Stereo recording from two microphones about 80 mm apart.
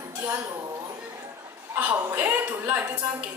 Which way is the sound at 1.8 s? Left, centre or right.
Right.